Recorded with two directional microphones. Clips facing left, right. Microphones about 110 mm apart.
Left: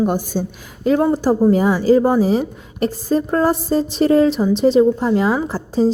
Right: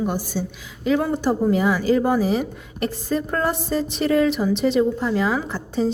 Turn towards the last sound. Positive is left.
turn(degrees=35)  # may be behind; listen again after turning